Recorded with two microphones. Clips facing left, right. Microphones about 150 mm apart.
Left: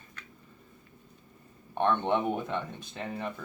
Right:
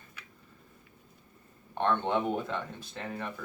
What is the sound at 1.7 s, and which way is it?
Speech, 15° left (ahead or behind).